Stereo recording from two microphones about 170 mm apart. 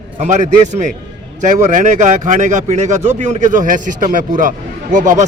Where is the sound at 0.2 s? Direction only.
45° right (ahead or behind).